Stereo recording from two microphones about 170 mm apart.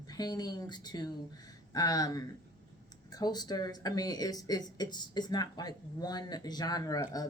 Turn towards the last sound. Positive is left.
turn(degrees=20)  # may be behind; listen again after turning